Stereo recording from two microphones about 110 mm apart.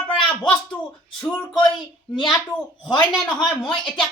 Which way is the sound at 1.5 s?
45° left (ahead or behind).